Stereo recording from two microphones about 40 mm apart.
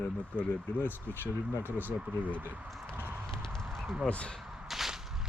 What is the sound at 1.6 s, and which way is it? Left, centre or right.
Speech, right.